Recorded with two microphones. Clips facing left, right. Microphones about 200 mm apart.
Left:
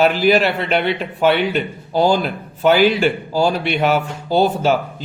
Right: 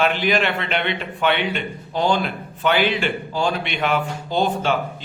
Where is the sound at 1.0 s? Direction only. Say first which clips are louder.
Left 5 dB; 40° left (ahead or behind).